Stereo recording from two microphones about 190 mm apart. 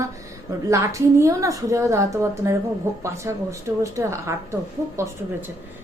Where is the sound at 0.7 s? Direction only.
15° right (ahead or behind).